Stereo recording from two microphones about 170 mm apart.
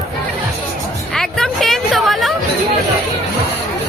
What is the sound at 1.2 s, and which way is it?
Hubbub, centre (ahead or behind).